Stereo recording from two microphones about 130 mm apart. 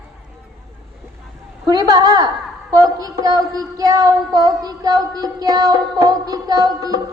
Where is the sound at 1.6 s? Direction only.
30° right (ahead or behind).